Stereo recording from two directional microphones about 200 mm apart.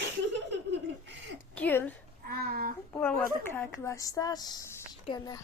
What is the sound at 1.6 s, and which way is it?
Speech, 10° left (ahead or behind).